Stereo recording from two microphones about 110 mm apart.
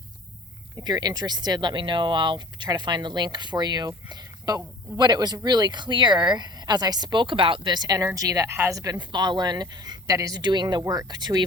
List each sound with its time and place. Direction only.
0.9 s speech: 40° right (ahead or behind)
9.0 s speech: 40° right (ahead or behind)